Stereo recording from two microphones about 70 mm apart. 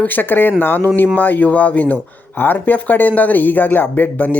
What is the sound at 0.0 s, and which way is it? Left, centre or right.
Speech, left.